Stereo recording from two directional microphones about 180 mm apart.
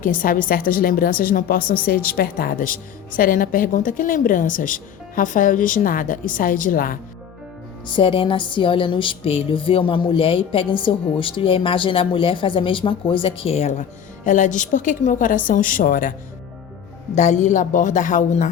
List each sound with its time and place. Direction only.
0.0 s a woman's voice: 50° left (ahead or behind)
7.9 s music: 30° left (ahead or behind)
14.3 s a woman's voice: 45° left (ahead or behind)
17.2 s a woman's voice: 40° left (ahead or behind)